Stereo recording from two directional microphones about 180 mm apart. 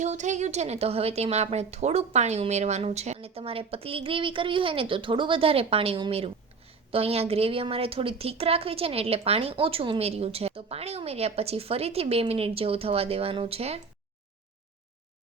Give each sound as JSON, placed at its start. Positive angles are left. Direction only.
{"t": 0.0, "sound": "a woman's voice", "side_deg": -40}